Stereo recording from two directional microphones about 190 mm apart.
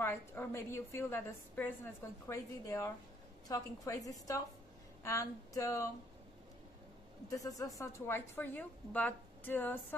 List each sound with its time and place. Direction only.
0.0 s a woman's voice: 10° left (ahead or behind)
7.2 s a woman's voice: 15° left (ahead or behind)